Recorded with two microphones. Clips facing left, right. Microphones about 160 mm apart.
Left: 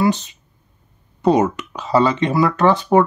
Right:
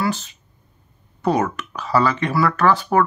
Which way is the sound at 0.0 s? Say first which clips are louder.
Left 5 dB; 20° left (ahead or behind).